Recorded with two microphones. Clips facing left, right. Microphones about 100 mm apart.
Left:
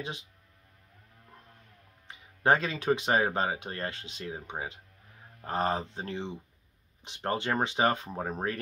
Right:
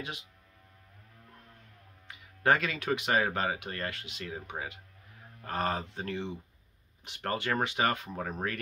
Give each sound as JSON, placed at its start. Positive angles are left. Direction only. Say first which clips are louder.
{"t": 2.0, "sound": "speech", "louder": "left 2 dB", "side_deg": 30}